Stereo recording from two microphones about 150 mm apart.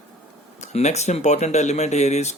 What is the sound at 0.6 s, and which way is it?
Speech, 50° left (ahead or behind).